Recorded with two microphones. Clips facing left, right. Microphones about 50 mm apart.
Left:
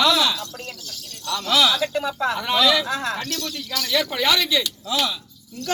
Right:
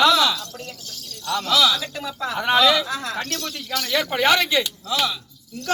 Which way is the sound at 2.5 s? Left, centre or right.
Centre.